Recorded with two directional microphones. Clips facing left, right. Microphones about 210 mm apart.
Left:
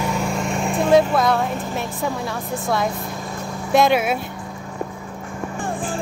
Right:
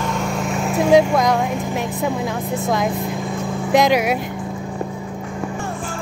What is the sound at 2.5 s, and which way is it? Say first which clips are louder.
Speech: right 1 dB; 15° right (ahead or behind).